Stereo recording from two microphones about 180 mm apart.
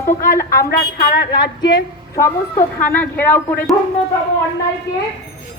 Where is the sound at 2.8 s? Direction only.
10° left (ahead or behind).